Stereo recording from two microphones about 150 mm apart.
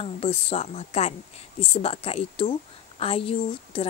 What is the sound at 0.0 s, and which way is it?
A woman's voice, 40° left (ahead or behind).